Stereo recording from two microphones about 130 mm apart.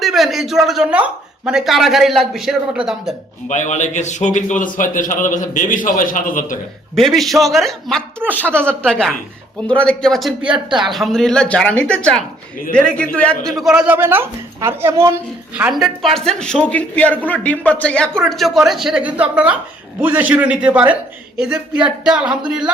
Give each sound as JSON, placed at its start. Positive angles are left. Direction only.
{"t": 0.0, "sound": "speech", "side_deg": 0}
{"t": 3.5, "sound": "a man's voice", "side_deg": 65}
{"t": 6.9, "sound": "a man's voice", "side_deg": 0}
{"t": 13.6, "sound": "speech", "side_deg": -5}
{"t": 13.9, "sound": "a woman's voice", "side_deg": -15}
{"t": 15.7, "sound": "a woman's voice", "side_deg": 0}